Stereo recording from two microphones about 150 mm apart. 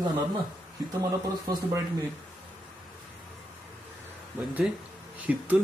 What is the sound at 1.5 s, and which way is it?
Speech, 25° right (ahead or behind).